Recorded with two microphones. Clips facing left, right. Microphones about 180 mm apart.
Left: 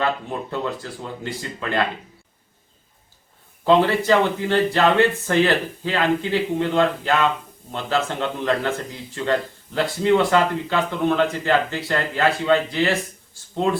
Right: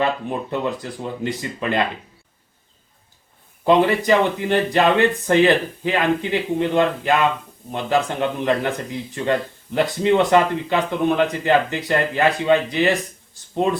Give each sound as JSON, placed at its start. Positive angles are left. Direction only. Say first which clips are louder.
{"t": 0.0, "sound": "speech", "louder": "right 2 dB", "side_deg": -15}
{"t": 3.6, "sound": "speech", "louder": "right 1 dB", "side_deg": -15}